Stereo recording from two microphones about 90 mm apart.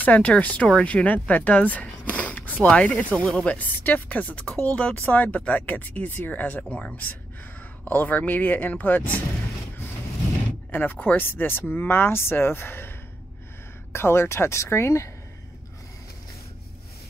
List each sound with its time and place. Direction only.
0.0 s speech: 15° left (ahead or behind)
3.5 s speech: 20° left (ahead or behind)
10.7 s speech: 20° left (ahead or behind)
13.9 s speech: 25° left (ahead or behind)